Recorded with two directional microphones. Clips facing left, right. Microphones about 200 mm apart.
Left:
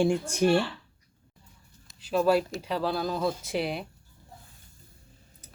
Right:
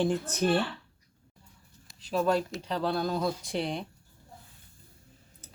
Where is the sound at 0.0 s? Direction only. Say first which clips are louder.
Left 3 dB; 10° left (ahead or behind).